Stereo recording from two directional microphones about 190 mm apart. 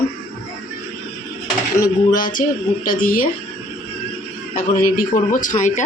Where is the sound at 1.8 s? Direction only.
45° left (ahead or behind).